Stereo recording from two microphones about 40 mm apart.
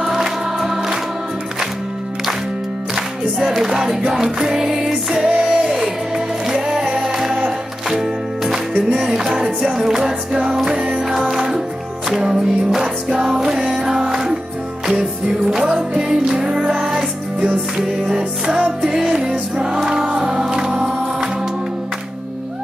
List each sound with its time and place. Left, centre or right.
0.0 s music: centre
3.3 s music: centre
5.4 s music: centre